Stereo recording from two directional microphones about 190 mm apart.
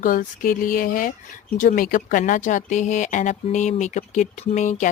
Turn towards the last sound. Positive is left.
turn(degrees=40)  # may be behind; listen again after turning